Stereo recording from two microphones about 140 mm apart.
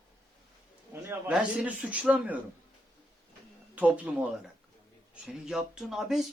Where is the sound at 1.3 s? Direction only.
5° right (ahead or behind).